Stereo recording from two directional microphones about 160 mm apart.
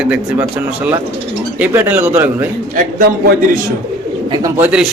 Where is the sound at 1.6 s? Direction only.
10° right (ahead or behind).